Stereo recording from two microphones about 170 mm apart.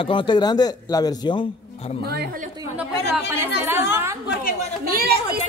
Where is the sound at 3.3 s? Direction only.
15° right (ahead or behind).